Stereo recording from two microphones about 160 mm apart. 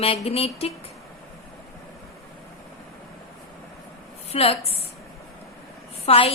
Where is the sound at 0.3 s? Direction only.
40° left (ahead or behind).